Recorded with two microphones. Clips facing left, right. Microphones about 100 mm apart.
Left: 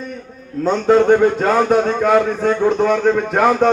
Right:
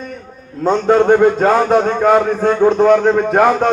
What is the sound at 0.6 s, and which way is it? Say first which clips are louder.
A man's voice: right 1 dB; 30° right (ahead or behind).